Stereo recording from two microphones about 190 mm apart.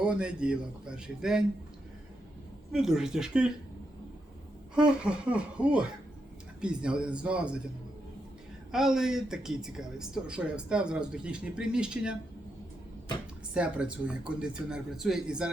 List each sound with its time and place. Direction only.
0.0 s speech: 5° right (ahead or behind)
2.7 s speech: centre (ahead or behind)
4.7 s speech: 5° right (ahead or behind)
8.7 s speech: centre (ahead or behind)
13.5 s speech: 5° right (ahead or behind)